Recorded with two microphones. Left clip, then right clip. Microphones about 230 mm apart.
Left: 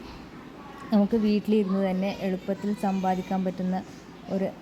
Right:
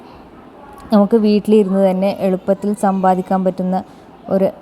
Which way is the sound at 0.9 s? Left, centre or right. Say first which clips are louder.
Right 12 dB; right.